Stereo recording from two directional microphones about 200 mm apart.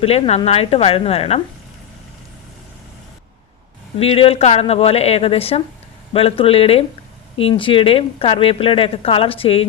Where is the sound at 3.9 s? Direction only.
30° left (ahead or behind).